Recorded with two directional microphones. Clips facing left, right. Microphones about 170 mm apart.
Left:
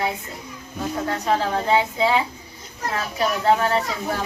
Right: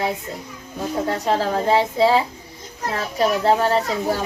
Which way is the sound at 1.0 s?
30° right (ahead or behind).